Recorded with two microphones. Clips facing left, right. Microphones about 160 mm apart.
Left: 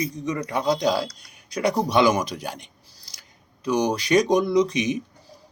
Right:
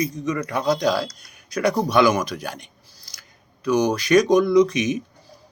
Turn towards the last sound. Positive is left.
turn(degrees=20)  # may be behind; listen again after turning